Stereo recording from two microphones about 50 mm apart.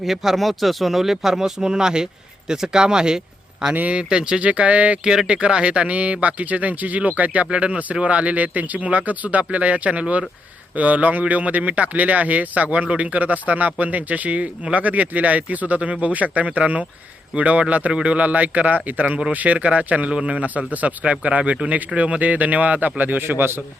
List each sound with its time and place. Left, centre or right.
0.0 s speech: centre; by 4.9 s right
5.0 s speech: centre; by 23.6 s right